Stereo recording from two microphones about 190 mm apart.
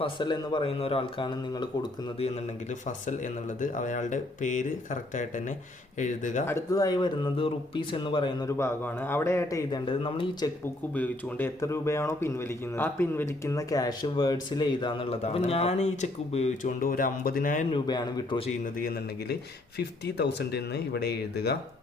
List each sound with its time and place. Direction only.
0.0 s speech: 25° left (ahead or behind)
3.6 s speech: 40° left (ahead or behind)
6.5 s speech: 15° left (ahead or behind)
8.4 s speech: 15° left (ahead or behind)
10.9 s speech: 10° left (ahead or behind); by 17.7 s 45° left (ahead or behind)
17.7 s speech: 20° left (ahead or behind)
18.6 s speech: 50° left (ahead or behind)
19.8 s speech: 60° left (ahead or behind)